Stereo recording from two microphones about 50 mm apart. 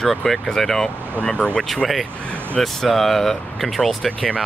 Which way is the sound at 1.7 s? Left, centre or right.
Centre.